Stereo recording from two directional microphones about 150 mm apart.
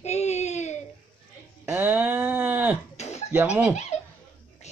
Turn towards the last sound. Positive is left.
turn(degrees=-5)  # may be behind; listen again after turning